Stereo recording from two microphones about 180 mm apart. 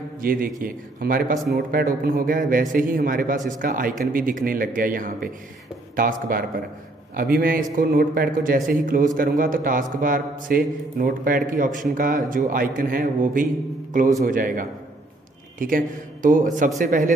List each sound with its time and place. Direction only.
0.2 s a man's voice: 50° right (ahead or behind)